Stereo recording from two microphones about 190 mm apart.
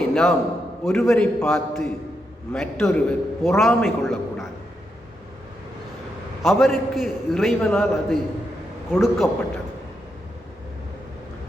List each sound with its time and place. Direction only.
0.1 s a man's voice: 5° left (ahead or behind)
6.4 s a man's voice: centre (ahead or behind)